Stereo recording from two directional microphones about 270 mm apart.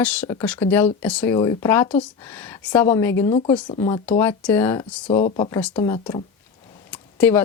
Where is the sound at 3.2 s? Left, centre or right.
Centre.